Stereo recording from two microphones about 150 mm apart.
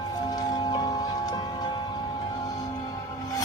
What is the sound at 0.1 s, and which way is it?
Music, 25° left (ahead or behind).